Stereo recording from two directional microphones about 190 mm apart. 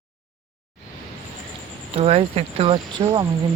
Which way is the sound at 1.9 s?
30° right (ahead or behind).